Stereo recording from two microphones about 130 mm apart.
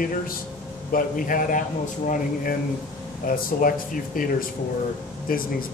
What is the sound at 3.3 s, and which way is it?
A man's voice, 90° left.